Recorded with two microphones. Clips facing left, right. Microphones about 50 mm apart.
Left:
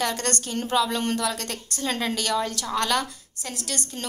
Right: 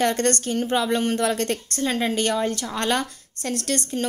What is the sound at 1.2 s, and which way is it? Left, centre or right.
Speech, right.